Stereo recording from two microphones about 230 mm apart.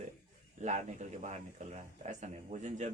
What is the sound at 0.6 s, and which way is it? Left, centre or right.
A man's voice, right.